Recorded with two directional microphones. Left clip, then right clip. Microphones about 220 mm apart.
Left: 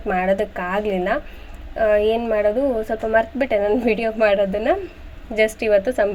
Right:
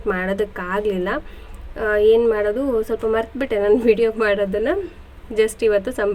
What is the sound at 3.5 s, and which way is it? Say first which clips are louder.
A woman's voice: right 5 dB; 10° right (ahead or behind).